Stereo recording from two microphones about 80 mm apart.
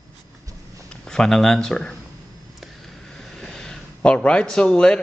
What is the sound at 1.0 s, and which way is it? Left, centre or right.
Speech, centre.